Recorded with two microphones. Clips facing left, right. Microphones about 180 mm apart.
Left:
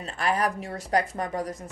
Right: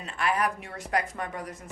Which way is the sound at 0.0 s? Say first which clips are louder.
Left 2 dB; 35° left (ahead or behind).